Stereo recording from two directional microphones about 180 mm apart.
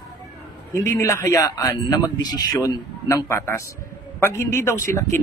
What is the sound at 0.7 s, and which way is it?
A man's voice, 20° left (ahead or behind).